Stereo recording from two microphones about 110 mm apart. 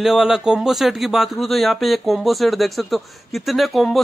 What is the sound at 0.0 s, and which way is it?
Speech, 5° right (ahead or behind).